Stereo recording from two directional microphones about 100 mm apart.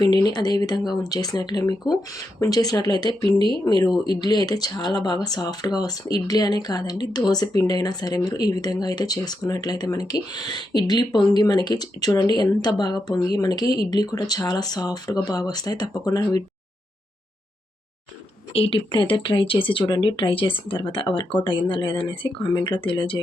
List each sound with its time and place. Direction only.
0.0 s speech: 45° left (ahead or behind)
18.5 s speech: 75° left (ahead or behind)
18.9 s speech: 50° left (ahead or behind)
22.4 s speech: 40° left (ahead or behind)